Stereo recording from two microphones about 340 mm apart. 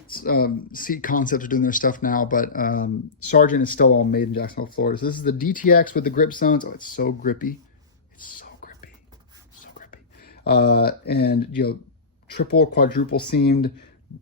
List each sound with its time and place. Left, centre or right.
0.1 s speech: left
8.2 s whispering: left
9.7 s speech: left